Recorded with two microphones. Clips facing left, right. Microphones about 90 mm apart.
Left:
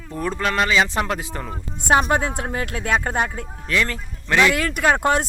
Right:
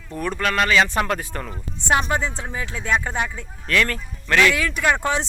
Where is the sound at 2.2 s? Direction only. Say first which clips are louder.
Left 3 dB; 55° left (ahead or behind).